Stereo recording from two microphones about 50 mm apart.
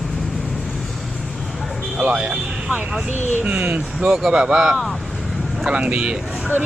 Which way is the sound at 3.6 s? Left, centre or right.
Right.